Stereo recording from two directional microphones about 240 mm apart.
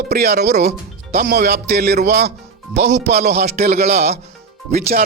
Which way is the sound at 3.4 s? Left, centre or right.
Right.